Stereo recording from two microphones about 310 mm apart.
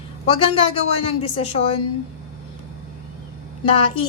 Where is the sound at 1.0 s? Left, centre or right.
Centre.